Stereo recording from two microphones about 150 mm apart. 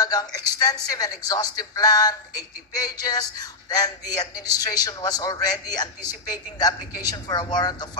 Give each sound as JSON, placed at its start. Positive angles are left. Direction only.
{"t": 0.0, "sound": "speech", "side_deg": 25}